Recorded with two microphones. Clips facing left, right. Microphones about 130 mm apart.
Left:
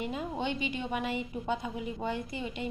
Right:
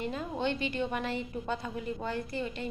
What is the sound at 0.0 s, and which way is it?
A woman's voice, 15° left (ahead or behind).